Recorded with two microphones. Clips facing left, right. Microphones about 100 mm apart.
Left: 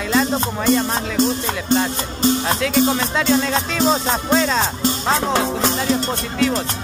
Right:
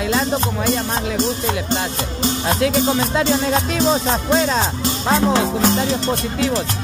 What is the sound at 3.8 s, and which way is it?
Music, 5° right (ahead or behind).